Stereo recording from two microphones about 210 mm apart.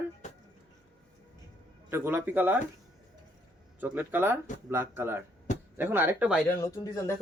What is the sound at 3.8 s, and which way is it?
Speech, 10° right (ahead or behind).